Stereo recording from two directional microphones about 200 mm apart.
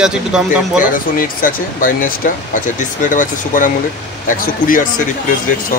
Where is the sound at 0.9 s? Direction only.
45° left (ahead or behind).